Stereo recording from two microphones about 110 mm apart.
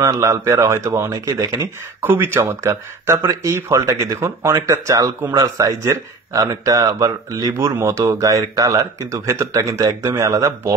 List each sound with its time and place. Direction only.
0.0 s speech: 30° right (ahead or behind)